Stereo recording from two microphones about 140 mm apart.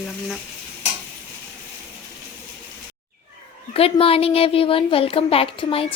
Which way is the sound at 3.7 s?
45° left (ahead or behind).